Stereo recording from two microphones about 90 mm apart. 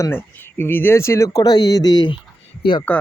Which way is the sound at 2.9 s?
20° left (ahead or behind).